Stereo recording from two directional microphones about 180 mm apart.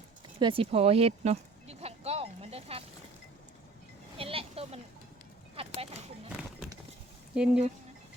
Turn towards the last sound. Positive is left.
turn(degrees=-5)  # may be behind; listen again after turning